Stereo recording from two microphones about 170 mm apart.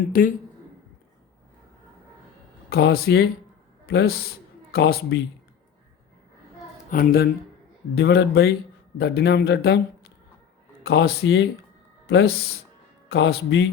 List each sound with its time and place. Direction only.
0.1 s speech: 55° left (ahead or behind)
2.6 s a man's voice: 65° left (ahead or behind)
6.9 s speech: 60° left (ahead or behind)
7.9 s a man's voice: 75° left (ahead or behind)